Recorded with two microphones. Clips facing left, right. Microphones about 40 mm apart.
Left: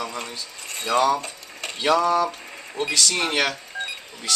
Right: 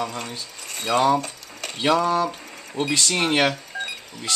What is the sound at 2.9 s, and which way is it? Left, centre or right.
Speech, right.